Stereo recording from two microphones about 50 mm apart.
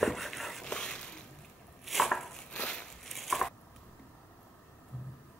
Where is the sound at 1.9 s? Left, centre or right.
Centre.